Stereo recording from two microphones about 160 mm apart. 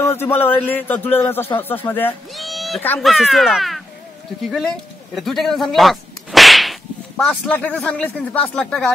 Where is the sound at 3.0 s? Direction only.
Centre (ahead or behind).